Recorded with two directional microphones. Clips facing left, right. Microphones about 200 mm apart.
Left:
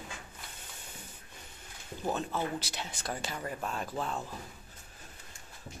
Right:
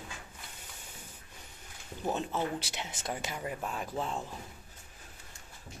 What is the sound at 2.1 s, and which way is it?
Speech, 25° right (ahead or behind).